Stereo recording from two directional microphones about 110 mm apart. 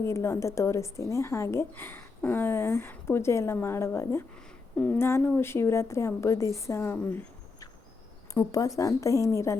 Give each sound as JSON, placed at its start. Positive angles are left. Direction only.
{"t": 0.0, "sound": "a woman's voice", "side_deg": 25}
{"t": 4.4, "sound": "a sound", "side_deg": 10}
{"t": 4.9, "sound": "a woman's voice", "side_deg": 20}
{"t": 8.3, "sound": "a woman's voice", "side_deg": 30}